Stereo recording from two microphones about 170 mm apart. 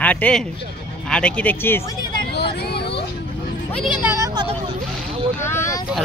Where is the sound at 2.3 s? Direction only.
70° left (ahead or behind).